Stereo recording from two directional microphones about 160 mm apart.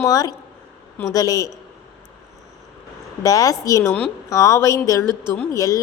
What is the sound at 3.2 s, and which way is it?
A woman's voice, 20° left (ahead or behind).